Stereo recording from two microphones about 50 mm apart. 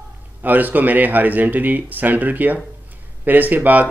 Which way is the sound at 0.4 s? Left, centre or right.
Right.